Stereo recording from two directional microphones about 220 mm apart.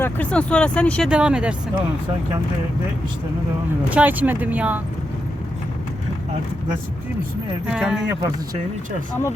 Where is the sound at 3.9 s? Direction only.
5° right (ahead or behind).